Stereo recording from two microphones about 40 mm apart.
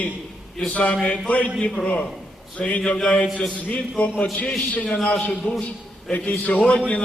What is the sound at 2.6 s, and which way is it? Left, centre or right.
A man's voice, left.